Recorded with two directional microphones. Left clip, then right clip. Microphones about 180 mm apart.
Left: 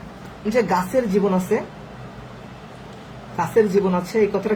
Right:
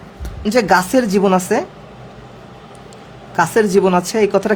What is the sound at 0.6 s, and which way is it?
Speech, 55° right (ahead or behind).